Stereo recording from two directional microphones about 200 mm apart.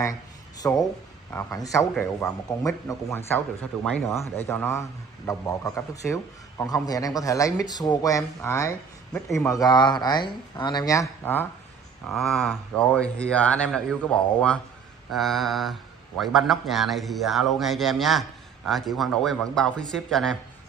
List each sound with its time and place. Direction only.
0.0 s a sound: 15° left (ahead or behind)
1.3 s speech: 15° left (ahead or behind)
12.1 s speech: centre (ahead or behind)